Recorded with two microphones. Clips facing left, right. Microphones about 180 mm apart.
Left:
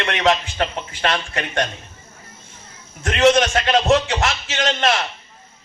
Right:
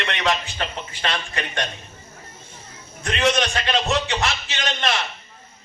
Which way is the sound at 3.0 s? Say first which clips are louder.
Left 6 dB; 50° left (ahead or behind).